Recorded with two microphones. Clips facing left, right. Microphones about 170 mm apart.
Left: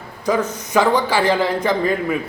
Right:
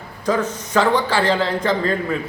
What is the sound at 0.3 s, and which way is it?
A man's voice, 10° left (ahead or behind).